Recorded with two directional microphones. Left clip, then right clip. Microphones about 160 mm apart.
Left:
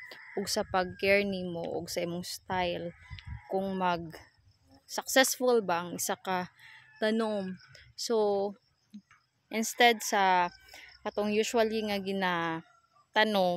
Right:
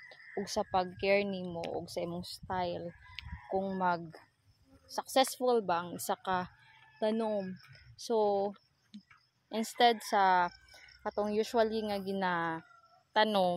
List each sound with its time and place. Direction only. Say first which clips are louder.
0.1 s speech: left 3 dB; 45° left (ahead or behind)
7.0 s speech: left 2 dB; 45° left (ahead or behind)
8.9 s a sound: left 2 dB; 90° right
9.5 s speech: left 3 dB; 35° left (ahead or behind)